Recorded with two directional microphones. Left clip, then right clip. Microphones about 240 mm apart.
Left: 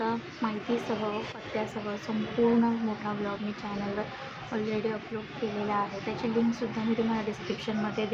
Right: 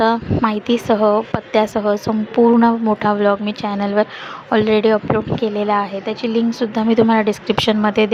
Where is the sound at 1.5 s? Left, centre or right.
Right.